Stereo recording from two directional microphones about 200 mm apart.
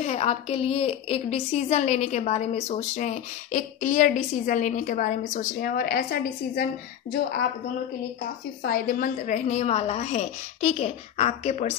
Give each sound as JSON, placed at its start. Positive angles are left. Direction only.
{"t": 0.0, "sound": "a woman's voice", "side_deg": 30}
{"t": 8.6, "sound": "a woman's voice", "side_deg": 45}